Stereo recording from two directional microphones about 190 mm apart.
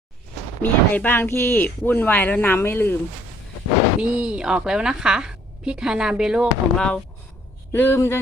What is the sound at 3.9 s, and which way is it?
A woman's voice, 5° right (ahead or behind).